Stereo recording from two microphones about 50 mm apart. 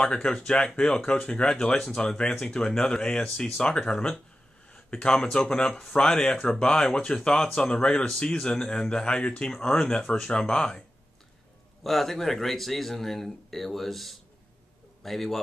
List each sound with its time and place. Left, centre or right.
0.0 s speech: centre
11.8 s speech: centre